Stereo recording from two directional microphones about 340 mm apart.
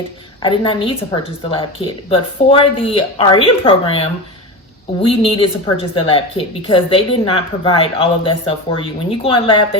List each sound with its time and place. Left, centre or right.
0.4 s a woman's voice: centre